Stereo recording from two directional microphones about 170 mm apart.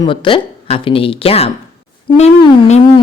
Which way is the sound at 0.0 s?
30° left (ahead or behind).